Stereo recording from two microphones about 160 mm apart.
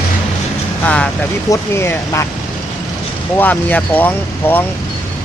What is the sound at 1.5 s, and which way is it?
Speech, 15° left (ahead or behind).